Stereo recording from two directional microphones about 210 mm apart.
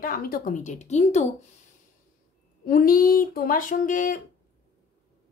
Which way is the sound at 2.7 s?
45° left (ahead or behind).